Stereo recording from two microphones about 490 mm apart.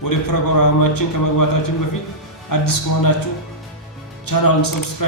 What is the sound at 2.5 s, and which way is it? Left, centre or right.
Speech, left.